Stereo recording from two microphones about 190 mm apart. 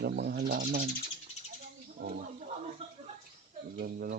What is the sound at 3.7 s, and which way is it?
Speech, 50° right (ahead or behind).